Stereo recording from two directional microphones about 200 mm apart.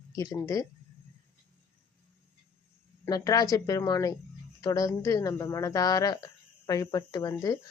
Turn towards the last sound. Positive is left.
turn(degrees=20)  # may be behind; listen again after turning